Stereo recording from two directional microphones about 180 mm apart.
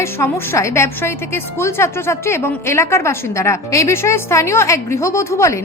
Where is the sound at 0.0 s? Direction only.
15° left (ahead or behind).